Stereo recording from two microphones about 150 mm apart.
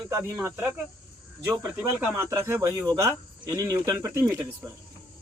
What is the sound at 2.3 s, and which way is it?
Speech, 15° right (ahead or behind).